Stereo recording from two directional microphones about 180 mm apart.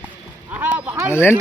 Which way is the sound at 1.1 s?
15° left (ahead or behind).